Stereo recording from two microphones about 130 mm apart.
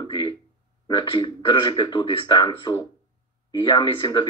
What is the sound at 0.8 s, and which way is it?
A man's voice, 40° left (ahead or behind).